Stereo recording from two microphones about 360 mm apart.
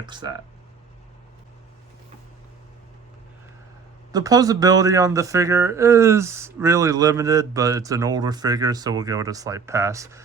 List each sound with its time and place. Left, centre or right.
0.0 s a man's voice: centre
4.1 s a man's voice: centre